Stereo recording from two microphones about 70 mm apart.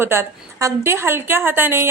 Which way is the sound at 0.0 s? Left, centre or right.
Right.